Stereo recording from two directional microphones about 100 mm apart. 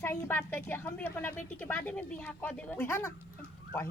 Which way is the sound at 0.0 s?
25° left (ahead or behind).